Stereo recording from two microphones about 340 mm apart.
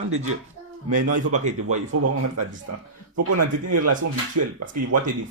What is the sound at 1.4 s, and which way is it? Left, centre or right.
Speech, right.